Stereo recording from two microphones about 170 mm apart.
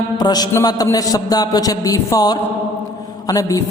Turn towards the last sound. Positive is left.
turn(degrees=20)  # may be behind; listen again after turning